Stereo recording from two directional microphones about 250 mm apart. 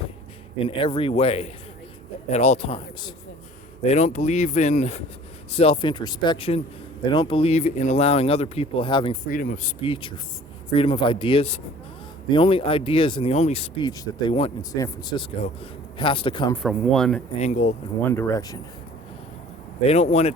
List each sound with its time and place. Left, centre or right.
0.6 s speech: left
9.2 s speech: left
16.6 s speech: centre
17.4 s speech: left
18.1 s speech: centre
19.9 s speech: left